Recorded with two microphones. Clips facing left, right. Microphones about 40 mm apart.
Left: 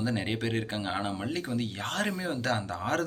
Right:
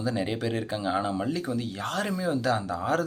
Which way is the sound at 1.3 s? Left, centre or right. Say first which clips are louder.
Right 2 dB; left.